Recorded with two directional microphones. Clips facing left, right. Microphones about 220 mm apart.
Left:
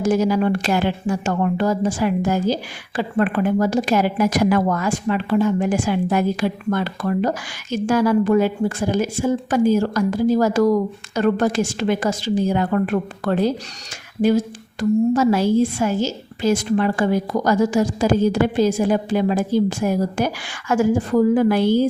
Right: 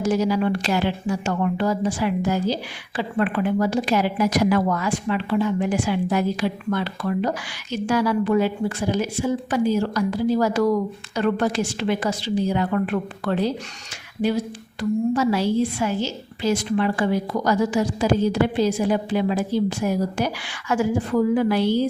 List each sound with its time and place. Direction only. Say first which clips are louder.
0.0 s a woman's voice: left 3 dB; 50° left (ahead or behind)